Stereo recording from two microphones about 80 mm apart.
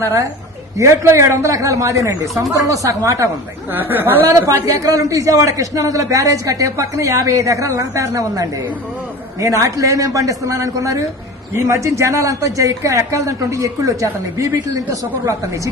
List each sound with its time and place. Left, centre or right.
0.8 s a man's voice: right
2.2 s speech: centre
2.6 s a man's voice: right
3.7 s speech: right
4.3 s a man's voice: right